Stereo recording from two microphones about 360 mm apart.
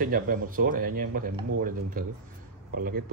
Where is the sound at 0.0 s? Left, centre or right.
Right.